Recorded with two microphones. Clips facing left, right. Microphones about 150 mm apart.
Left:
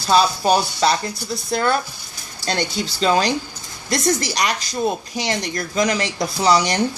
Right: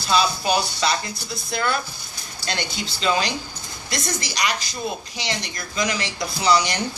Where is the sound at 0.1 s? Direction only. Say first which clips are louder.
Left 5 dB; 40° left (ahead or behind).